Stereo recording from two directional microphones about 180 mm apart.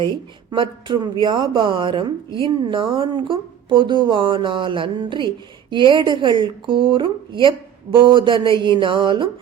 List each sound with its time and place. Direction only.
0.5 s a woman's voice: 25° right (ahead or behind)